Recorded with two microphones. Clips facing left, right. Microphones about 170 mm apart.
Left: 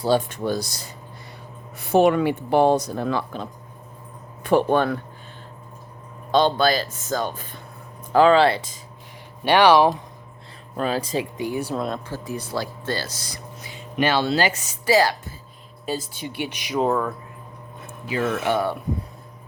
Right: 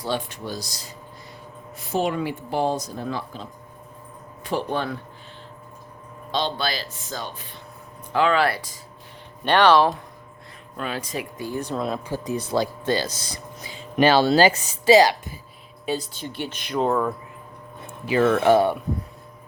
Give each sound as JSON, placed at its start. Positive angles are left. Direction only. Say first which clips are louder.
{"t": 0.3, "sound": "speech", "louder": "left 7 dB", "side_deg": 55}
{"t": 4.4, "sound": "speech", "louder": "left 7 dB", "side_deg": 55}
{"t": 6.3, "sound": "speech", "louder": "left 8 dB", "side_deg": 50}
{"t": 8.1, "sound": "speech", "louder": "left 5 dB", "side_deg": 35}
{"t": 9.4, "sound": "speech", "louder": "left 2 dB", "side_deg": 10}
{"t": 10.8, "sound": "speech", "louder": "left 6 dB", "side_deg": 35}
{"t": 11.1, "sound": "speech", "louder": "left 4 dB", "side_deg": 20}
{"t": 11.7, "sound": "speech", "louder": "even", "side_deg": 0}
{"t": 12.0, "sound": "speech", "louder": "right 3 dB", "side_deg": -15}
{"t": 14.8, "sound": "speech", "louder": "right 4 dB", "side_deg": -15}
{"t": 16.4, "sound": "speech", "louder": "left 1 dB", "side_deg": 15}
{"t": 18.1, "sound": "speech", "louder": "right 5 dB", "side_deg": -90}